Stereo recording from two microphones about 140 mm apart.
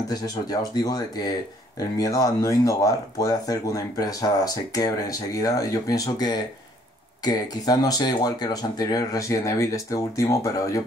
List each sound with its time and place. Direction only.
0.1 s speech: 30° left (ahead or behind)